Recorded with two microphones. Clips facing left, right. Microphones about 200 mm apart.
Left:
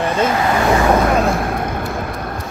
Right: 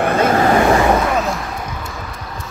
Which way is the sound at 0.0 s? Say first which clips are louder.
Right 2 dB; 55° right (ahead or behind).